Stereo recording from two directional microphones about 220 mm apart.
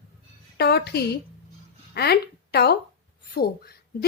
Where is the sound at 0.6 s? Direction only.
50° left (ahead or behind).